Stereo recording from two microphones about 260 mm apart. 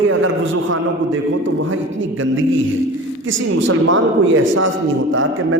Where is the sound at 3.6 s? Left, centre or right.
Right.